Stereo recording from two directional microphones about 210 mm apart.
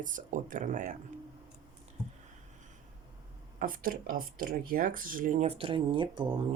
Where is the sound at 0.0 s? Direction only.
40° right (ahead or behind).